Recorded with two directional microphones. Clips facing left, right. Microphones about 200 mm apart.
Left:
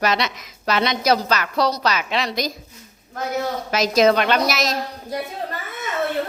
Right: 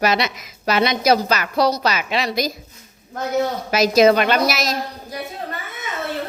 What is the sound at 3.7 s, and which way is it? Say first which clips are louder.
A woman's voice: right 2 dB; 5° right (ahead or behind).